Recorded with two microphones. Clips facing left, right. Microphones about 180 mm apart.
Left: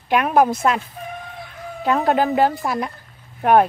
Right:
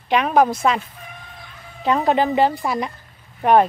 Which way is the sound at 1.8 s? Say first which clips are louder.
Even; centre (ahead or behind).